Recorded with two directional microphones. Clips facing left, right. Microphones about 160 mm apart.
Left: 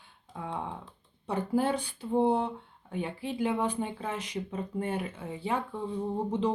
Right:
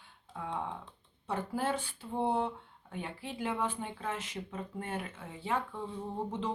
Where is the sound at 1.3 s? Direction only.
15° left (ahead or behind).